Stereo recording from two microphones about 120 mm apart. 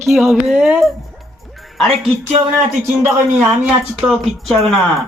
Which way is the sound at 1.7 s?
Centre (ahead or behind).